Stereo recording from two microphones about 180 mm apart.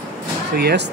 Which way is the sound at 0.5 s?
65° right (ahead or behind).